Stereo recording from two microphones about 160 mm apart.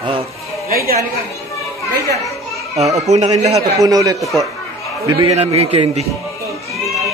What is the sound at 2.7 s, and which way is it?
Speech, 45° right (ahead or behind).